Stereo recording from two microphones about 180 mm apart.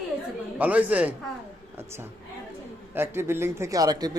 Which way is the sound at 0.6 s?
10° right (ahead or behind).